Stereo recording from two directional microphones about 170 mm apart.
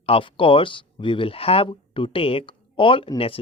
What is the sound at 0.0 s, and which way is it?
Speech, 30° left (ahead or behind).